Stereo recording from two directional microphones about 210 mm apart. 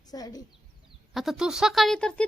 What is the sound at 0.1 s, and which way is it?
Speech, 20° left (ahead or behind).